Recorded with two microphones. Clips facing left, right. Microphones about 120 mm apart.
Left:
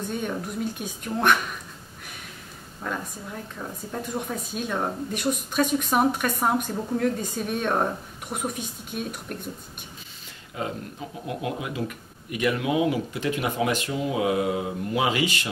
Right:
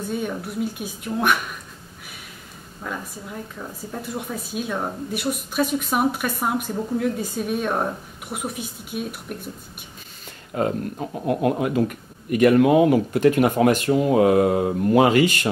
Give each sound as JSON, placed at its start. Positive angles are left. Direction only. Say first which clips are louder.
{"t": 0.1, "sound": "a woman's voice", "louder": "right 4 dB", "side_deg": -5}
{"t": 2.8, "sound": "a woman's voice", "louder": "even", "side_deg": -5}
{"t": 10.5, "sound": "a man's voice", "louder": "right 8 dB", "side_deg": -50}